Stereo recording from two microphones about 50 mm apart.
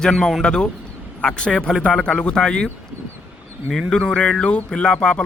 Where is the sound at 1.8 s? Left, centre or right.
Left.